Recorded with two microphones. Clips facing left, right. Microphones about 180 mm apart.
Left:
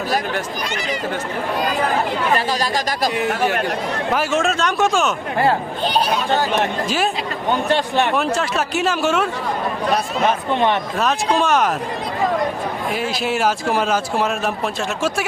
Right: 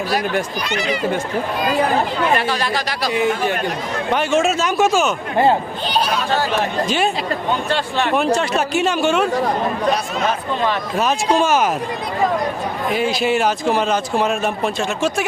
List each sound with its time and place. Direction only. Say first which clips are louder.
2.3 s speech: even; 40° left (ahead or behind)
4.1 s speech: right 3 dB; 5° left (ahead or behind)
6.8 s speech: right 2 dB; centre (ahead or behind)
8.1 s speech: right 3 dB; centre (ahead or behind)
10.9 s speech: right 2 dB; centre (ahead or behind)
12.9 s speech: right 5 dB; centre (ahead or behind)